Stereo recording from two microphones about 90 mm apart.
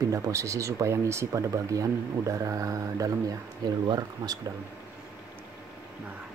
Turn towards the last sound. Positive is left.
turn(degrees=-55)  # may be behind; listen again after turning